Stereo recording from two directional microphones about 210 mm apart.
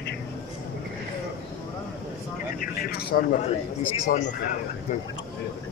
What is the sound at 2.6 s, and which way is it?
Speech, 45° left (ahead or behind).